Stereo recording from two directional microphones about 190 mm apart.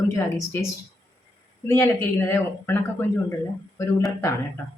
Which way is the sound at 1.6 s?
15° left (ahead or behind).